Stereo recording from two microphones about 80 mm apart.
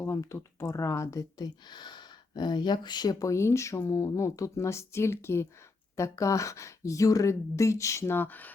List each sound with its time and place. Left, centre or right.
0.3 s speech: left